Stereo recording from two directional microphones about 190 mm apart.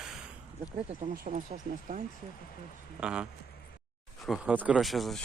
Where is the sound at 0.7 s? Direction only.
30° right (ahead or behind).